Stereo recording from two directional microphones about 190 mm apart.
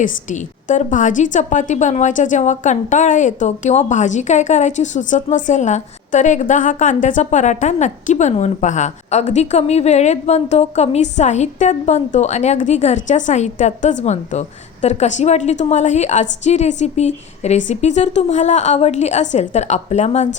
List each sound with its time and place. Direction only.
0.0 s a woman's voice: 40° left (ahead or behind)